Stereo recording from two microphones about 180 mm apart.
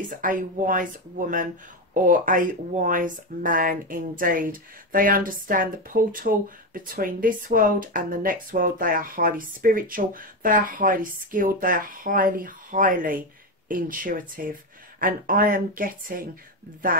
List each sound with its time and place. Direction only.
0.2 s speech: 50° right (ahead or behind)